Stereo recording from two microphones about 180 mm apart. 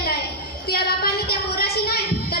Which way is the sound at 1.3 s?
60° left (ahead or behind).